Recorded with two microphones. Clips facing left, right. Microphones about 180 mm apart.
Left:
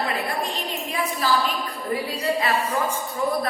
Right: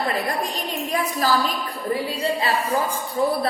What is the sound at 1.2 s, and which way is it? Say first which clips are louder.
Speech: right 1 dB; 40° right (ahead or behind).